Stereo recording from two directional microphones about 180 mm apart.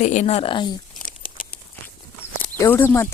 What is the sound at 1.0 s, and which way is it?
Crumpling, 50° left (ahead or behind).